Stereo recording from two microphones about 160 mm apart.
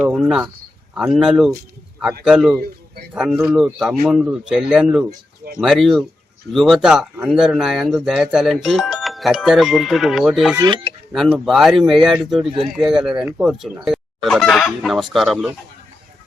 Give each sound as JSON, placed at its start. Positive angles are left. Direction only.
{"t": 0.1, "sound": "speech", "side_deg": 0}
{"t": 10.6, "sound": "speech", "side_deg": -30}
{"t": 11.1, "sound": "speech", "side_deg": 0}